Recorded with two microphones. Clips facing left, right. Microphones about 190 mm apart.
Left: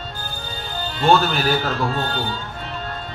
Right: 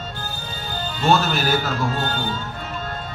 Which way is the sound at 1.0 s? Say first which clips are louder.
Left 2 dB; 45° right (ahead or behind).